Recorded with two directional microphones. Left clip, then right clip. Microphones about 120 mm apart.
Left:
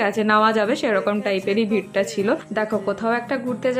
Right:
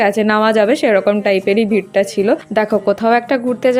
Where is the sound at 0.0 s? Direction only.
50° right (ahead or behind).